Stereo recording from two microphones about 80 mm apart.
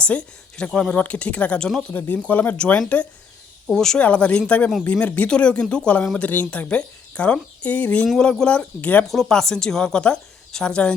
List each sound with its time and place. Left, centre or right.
0.0 s speech: centre
2.0 s speech: centre
8.0 s speech: centre
9.0 s speech: centre